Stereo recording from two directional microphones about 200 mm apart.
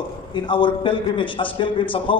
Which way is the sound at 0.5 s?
25° left (ahead or behind).